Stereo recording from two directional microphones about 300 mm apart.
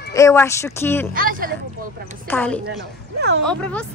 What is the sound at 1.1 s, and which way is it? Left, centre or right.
Speech, right.